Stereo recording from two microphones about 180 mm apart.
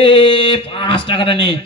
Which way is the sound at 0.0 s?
30° left (ahead or behind).